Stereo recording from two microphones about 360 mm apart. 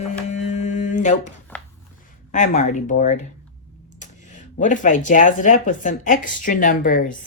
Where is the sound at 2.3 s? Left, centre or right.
Left.